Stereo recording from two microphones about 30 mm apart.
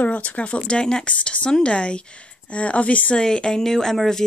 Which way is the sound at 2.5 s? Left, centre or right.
Left.